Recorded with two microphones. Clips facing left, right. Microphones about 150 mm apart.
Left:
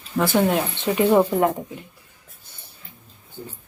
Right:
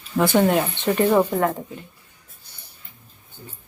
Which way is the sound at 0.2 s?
Centre (ahead or behind).